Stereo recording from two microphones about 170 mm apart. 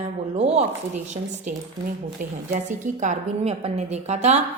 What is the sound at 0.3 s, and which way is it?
Speech, 35° right (ahead or behind).